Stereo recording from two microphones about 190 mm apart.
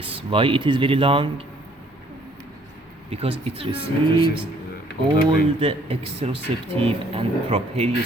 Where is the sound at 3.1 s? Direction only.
30° right (ahead or behind).